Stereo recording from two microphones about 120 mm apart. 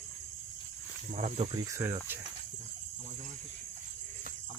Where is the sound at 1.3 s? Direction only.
45° right (ahead or behind).